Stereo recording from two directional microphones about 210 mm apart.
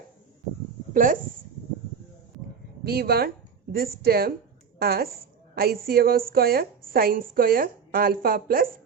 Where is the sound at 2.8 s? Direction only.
50° right (ahead or behind).